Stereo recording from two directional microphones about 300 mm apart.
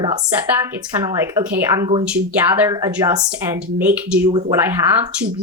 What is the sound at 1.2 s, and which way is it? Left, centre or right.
Speech, centre.